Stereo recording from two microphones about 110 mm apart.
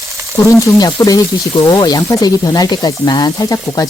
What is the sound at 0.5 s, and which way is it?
Speech, 30° left (ahead or behind).